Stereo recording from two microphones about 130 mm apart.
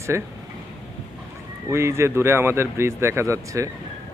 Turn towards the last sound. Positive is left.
turn(degrees=-25)  # may be behind; listen again after turning